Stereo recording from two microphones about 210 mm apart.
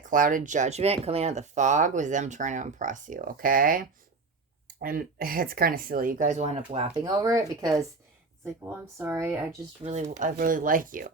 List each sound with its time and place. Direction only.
0.0 s speech: 40° right (ahead or behind)
7.0 s speech: 15° right (ahead or behind)
9.8 s speech: 30° right (ahead or behind)